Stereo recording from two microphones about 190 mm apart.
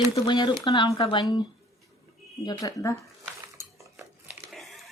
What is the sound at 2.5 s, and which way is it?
Speech, 20° left (ahead or behind).